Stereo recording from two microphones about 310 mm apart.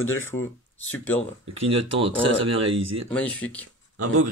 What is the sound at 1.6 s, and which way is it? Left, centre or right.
Speech, centre.